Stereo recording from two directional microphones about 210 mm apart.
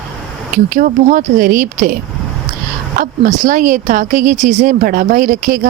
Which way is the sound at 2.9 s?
40° right (ahead or behind).